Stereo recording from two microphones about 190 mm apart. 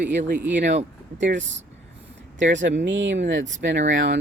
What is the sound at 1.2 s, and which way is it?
Speech, 70° right (ahead or behind).